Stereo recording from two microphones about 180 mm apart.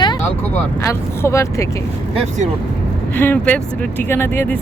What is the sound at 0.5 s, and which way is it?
Speech, 15° left (ahead or behind).